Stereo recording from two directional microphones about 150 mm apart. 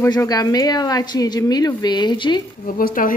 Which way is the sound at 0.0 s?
20° left (ahead or behind).